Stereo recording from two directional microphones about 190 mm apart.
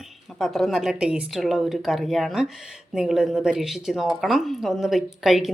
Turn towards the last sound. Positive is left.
turn(degrees=0)  # may be behind; listen again after turning